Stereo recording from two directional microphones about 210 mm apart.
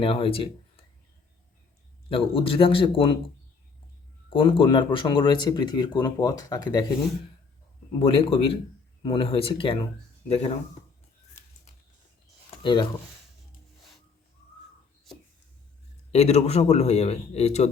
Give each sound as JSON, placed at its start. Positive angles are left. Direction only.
{"t": 0.0, "sound": "speech", "side_deg": 25}
{"t": 2.0, "sound": "speech", "side_deg": 25}
{"t": 4.3, "sound": "speech", "side_deg": 25}
{"t": 7.9, "sound": "speech", "side_deg": 25}
{"t": 12.6, "sound": "speech", "side_deg": 20}
{"t": 16.1, "sound": "a man's voice", "side_deg": 30}